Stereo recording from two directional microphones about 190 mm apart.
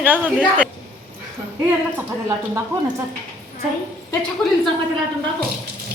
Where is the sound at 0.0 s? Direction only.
10° right (ahead or behind).